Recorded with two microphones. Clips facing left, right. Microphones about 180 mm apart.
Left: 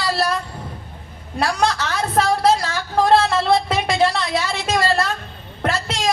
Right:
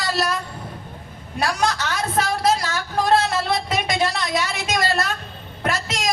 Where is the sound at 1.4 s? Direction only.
30° left (ahead or behind).